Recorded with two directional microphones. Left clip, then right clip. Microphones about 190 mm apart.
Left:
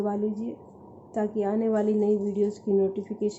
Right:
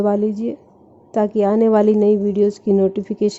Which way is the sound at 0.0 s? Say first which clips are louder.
Right 11 dB; 55° right (ahead or behind).